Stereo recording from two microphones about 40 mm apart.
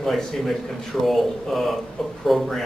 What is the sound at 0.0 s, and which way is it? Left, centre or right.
A man's voice, centre.